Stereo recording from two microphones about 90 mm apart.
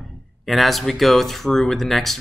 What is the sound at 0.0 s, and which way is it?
Speech, centre (ahead or behind).